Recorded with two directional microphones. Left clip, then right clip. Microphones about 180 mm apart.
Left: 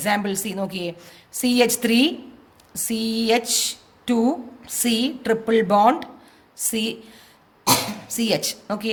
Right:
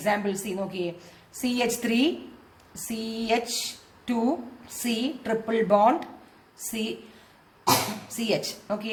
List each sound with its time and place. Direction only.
0.0 s a woman's voice: 40° left (ahead or behind)
8.1 s a woman's voice: 45° left (ahead or behind)